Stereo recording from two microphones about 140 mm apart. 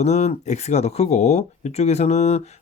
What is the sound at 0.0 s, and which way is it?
Speech, 50° left (ahead or behind).